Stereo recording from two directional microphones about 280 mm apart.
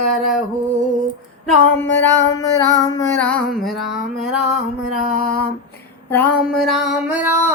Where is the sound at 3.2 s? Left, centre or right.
Centre.